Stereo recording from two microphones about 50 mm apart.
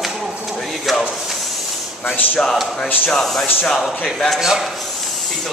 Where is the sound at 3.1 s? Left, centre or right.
Centre.